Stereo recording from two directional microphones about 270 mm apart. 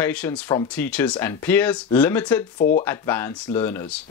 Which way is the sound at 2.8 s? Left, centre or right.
Centre.